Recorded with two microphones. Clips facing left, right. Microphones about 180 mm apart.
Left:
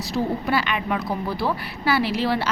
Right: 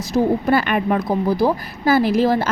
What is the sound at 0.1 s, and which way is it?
A woman's voice, 45° right (ahead or behind).